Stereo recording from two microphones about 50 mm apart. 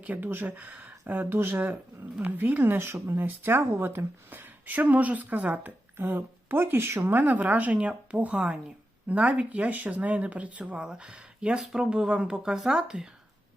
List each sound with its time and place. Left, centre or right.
0.0 s speech: right
0.4 s speech: right
2.7 s speech: right
6.0 s speech: right
7.1 s speech: right
10.8 s speech: centre